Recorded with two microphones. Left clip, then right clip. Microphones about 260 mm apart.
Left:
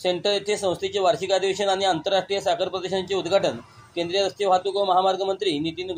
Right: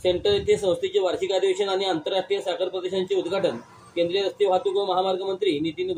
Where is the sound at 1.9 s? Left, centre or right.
Left.